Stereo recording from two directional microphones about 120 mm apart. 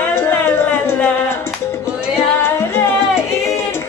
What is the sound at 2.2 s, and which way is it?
Music, 20° left (ahead or behind).